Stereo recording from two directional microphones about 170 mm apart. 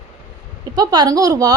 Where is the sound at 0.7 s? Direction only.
25° right (ahead or behind).